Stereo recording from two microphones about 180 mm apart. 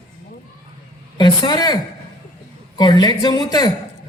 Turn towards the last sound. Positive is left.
turn(degrees=20)  # may be behind; listen again after turning